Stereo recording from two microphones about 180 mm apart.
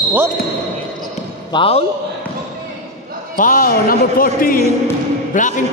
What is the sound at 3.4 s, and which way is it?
A man's voice, 50° left (ahead or behind).